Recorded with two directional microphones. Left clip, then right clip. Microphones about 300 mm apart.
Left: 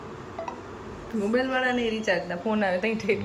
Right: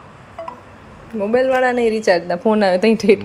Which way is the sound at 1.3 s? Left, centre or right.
Centre.